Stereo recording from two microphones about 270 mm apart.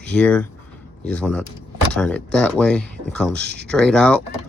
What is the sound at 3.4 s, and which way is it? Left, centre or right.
Speech, right.